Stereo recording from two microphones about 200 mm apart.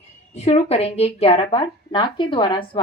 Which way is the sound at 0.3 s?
30° left (ahead or behind).